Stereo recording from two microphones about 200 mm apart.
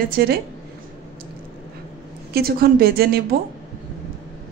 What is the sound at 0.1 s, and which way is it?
Speech, 50° right (ahead or behind).